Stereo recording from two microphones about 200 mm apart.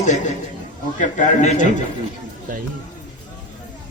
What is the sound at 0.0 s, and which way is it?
A man's voice, 35° left (ahead or behind).